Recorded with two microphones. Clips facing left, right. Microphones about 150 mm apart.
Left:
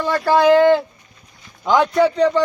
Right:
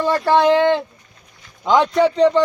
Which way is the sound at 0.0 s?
25° right (ahead or behind).